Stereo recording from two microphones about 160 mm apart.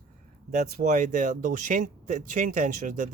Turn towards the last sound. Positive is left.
turn(degrees=-50)  # may be behind; listen again after turning